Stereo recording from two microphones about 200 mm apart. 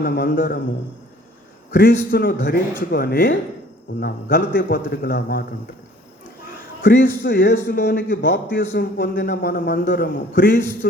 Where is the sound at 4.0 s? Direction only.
60° left (ahead or behind).